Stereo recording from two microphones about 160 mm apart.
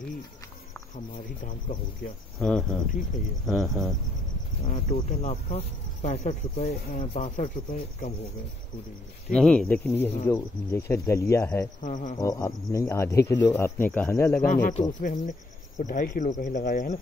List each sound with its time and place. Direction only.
2.3 s speech: centre (ahead or behind)
4.6 s speech: 40° left (ahead or behind)
9.3 s speech: 5° left (ahead or behind)
11.8 s speech: 55° left (ahead or behind)
12.2 s speech: 20° left (ahead or behind)
14.4 s speech: 55° left (ahead or behind)